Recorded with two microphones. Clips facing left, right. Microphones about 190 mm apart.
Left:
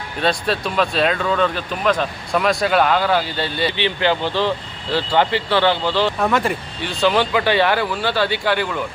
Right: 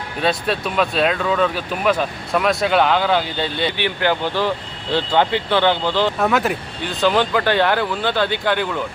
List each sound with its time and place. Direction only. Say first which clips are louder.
0.2 s speech: even; centre (ahead or behind)
3.8 s speech: left 1 dB; 10° right (ahead or behind)
4.9 s speech: even; 5° left (ahead or behind)
5.3 s speech: even; 15° right (ahead or behind)
6.1 s speech: right 1 dB; centre (ahead or behind)
7.0 s speech: even; 10° left (ahead or behind)